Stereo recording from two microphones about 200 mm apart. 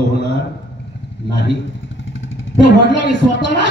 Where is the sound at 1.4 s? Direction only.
65° left (ahead or behind).